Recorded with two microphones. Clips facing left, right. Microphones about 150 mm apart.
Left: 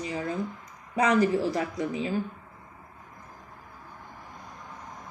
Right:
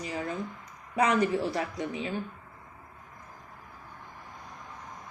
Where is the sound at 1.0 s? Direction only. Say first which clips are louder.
Left 2 dB; 35° left (ahead or behind).